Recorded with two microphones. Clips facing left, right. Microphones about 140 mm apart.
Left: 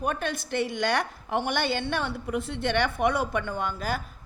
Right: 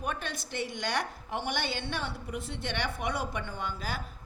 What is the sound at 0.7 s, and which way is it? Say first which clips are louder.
A woman's voice: left 6 dB; 65° left (ahead or behind).